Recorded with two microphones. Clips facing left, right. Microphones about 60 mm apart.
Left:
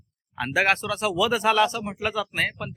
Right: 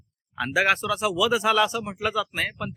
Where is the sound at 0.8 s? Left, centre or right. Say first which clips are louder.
Right 1 dB; centre.